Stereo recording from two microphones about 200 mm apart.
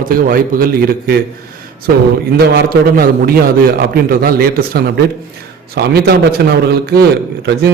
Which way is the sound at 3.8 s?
50° right (ahead or behind).